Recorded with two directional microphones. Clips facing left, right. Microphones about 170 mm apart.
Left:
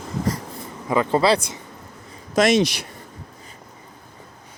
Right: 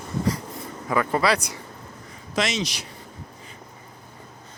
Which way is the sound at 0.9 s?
25° left (ahead or behind).